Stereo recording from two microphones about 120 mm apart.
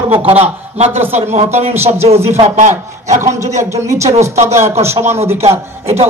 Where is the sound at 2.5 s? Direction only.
90° right.